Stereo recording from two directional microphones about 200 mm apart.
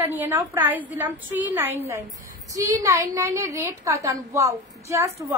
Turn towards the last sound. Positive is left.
turn(degrees=-15)  # may be behind; listen again after turning